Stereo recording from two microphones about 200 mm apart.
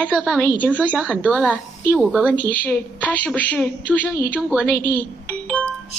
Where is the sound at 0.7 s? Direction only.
5° right (ahead or behind).